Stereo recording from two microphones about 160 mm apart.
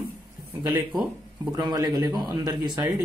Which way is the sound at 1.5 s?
25° right (ahead or behind).